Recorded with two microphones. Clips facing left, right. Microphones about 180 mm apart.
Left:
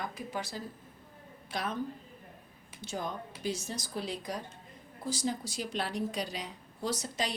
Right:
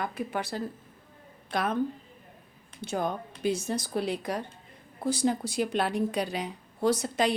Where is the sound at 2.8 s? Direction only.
60° right (ahead or behind).